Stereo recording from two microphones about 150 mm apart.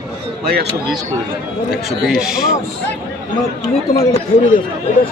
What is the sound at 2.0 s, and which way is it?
Speech, 5° right (ahead or behind).